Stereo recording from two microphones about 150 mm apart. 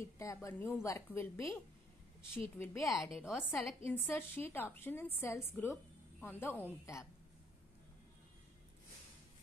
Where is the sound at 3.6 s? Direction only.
15° left (ahead or behind).